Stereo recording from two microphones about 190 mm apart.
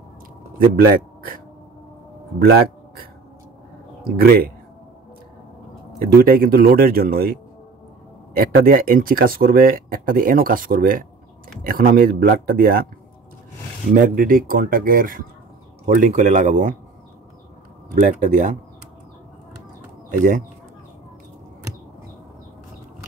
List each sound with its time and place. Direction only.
0.6 s a man's voice: 50° right (ahead or behind)
4.2 s speech: 55° right (ahead or behind)
6.1 s speech: 50° right (ahead or behind)
8.6 s speech: 50° right (ahead or behind)
13.9 s speech: 45° right (ahead or behind)
18.0 s speech: 45° right (ahead or behind)